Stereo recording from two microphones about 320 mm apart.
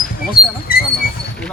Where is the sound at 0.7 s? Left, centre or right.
Left.